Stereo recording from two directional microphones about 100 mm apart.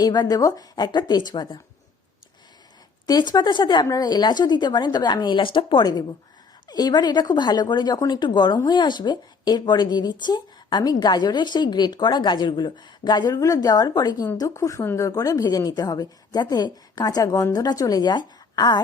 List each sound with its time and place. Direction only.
0.0 s a woman's voice: 45° left (ahead or behind)
3.1 s a woman's voice: 45° left (ahead or behind)